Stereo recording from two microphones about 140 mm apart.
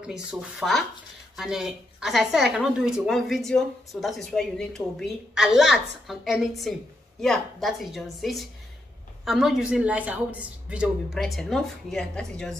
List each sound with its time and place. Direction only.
0.0 s a woman's voice: 5° right (ahead or behind)